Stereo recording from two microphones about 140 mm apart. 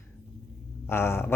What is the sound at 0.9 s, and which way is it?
Speech, 15° left (ahead or behind).